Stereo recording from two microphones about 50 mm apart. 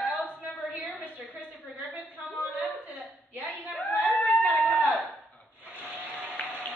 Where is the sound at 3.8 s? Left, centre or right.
Left.